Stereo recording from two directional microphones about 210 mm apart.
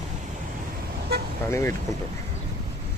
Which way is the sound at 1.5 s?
10° left (ahead or behind).